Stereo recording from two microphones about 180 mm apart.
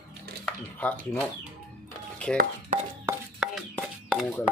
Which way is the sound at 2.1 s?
5° left (ahead or behind).